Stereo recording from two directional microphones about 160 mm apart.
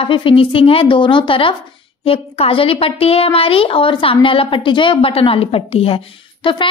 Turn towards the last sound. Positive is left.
turn(degrees=30)  # may be behind; listen again after turning